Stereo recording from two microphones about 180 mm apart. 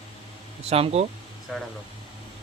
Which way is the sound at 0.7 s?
35° right (ahead or behind).